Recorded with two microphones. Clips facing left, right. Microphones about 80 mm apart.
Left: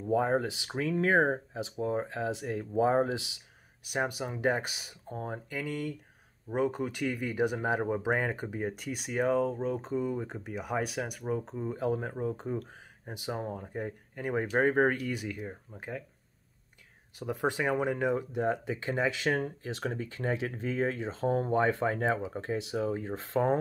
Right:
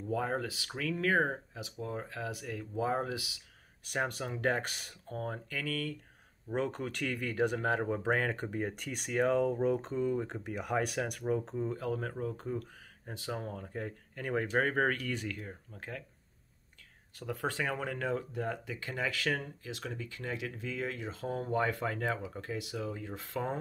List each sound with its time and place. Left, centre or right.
0.0 s speech: left
3.8 s speech: centre
5.0 s speech: centre
6.5 s speech: centre
11.8 s speech: left
17.2 s speech: centre
19.3 s speech: left